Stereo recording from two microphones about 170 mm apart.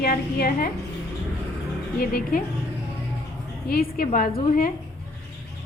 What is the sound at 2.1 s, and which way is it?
Speech, 60° left (ahead or behind).